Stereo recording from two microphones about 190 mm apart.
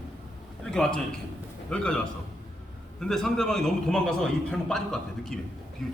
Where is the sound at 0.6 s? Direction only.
5° left (ahead or behind).